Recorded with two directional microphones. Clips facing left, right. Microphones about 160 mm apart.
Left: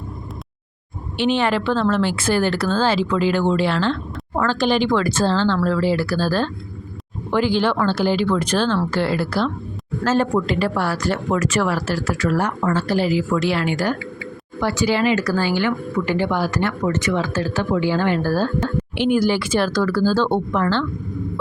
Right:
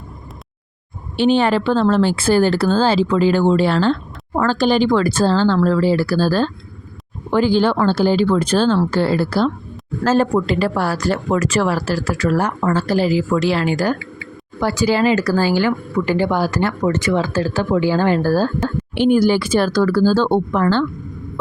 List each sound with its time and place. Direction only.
1.2 s speech: 35° right (ahead or behind)